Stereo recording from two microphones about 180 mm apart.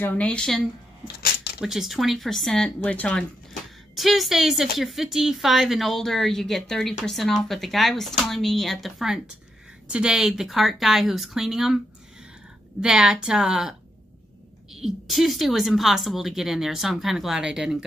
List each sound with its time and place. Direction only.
0.0 s speech: 10° left (ahead or behind)
1.0 s a sound: 60° left (ahead or behind)
1.6 s a woman's voice: centre (ahead or behind)
12.8 s a woman's voice: 5° right (ahead or behind)